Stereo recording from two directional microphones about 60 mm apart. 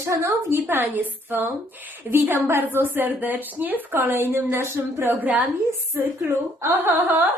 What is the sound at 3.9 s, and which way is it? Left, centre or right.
A woman's voice, right.